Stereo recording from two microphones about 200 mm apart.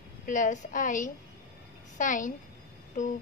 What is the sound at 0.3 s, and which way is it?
A woman's voice, 40° left (ahead or behind).